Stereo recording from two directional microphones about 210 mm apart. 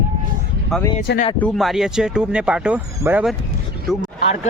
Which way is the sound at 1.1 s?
55° left (ahead or behind).